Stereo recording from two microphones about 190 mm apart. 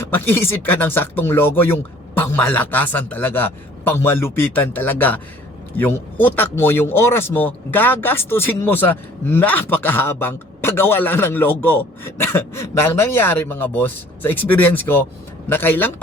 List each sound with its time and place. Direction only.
0.0 s speech: 10° left (ahead or behind)